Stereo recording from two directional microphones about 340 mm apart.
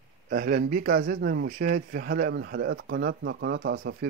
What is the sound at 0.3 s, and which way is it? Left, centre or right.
Speech, right.